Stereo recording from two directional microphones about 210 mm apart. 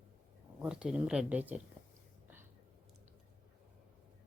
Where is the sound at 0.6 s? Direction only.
5° right (ahead or behind).